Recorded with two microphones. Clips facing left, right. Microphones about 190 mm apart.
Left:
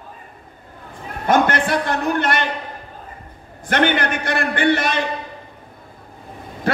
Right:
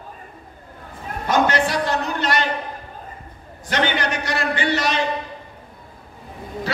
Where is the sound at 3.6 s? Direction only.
55° left (ahead or behind).